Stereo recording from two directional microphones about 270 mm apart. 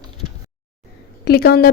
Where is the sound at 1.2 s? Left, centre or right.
Left.